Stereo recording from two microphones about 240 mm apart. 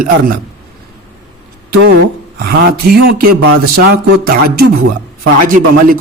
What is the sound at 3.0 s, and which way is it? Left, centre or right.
Music, right.